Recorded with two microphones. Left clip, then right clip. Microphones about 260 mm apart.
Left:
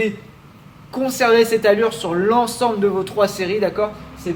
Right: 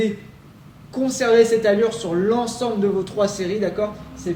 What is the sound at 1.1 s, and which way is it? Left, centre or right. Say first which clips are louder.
A man's voice: left 1 dB; centre.